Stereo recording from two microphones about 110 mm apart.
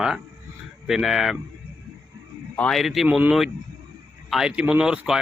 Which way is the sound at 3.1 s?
10° right (ahead or behind).